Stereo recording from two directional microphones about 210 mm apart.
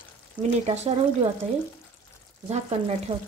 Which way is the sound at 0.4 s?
30° right (ahead or behind).